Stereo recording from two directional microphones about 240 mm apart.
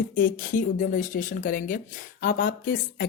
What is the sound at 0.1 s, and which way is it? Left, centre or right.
Speech, left.